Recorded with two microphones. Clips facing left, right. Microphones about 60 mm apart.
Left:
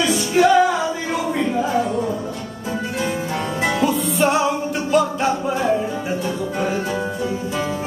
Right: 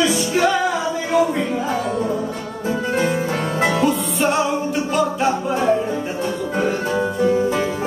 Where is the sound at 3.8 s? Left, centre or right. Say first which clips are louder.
Even; centre.